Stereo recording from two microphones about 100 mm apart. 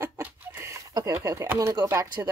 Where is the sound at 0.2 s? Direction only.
20° right (ahead or behind).